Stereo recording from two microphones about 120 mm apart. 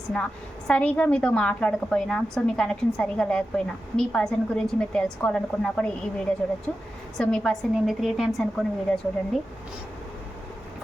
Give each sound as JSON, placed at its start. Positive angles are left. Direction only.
{"t": 0.7, "sound": "a woman's voice", "side_deg": 10}